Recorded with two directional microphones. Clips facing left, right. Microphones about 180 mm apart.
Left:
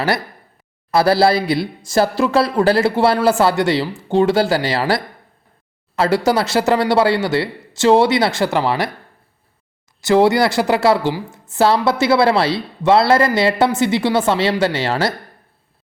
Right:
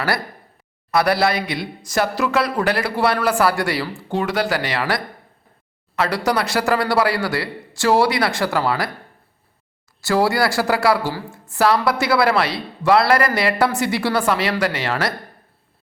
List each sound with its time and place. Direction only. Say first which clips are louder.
0.9 s a woman's voice: left 4 dB; 30° left (ahead or behind)
10.0 s a woman's voice: left 5 dB; 20° left (ahead or behind)